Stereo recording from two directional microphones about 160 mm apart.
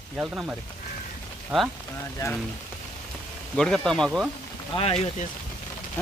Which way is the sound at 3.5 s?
5° left (ahead or behind).